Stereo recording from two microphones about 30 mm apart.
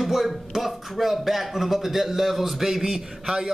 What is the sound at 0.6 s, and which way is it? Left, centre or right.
A man's voice, centre.